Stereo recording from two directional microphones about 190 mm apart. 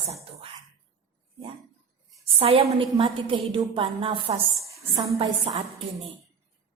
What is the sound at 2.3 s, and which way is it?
A woman's voice, 30° right (ahead or behind).